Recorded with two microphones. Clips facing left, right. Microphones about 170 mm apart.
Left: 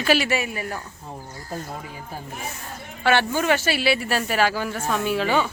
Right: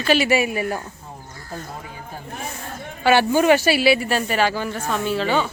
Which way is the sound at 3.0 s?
5° right (ahead or behind).